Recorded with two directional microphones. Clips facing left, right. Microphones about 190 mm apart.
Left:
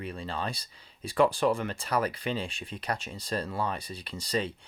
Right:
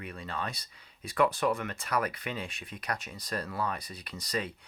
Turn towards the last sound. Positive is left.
turn(degrees=30)  # may be behind; listen again after turning